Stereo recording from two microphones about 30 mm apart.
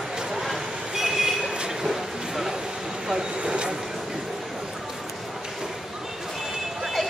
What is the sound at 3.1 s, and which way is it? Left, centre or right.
Vehicle, right.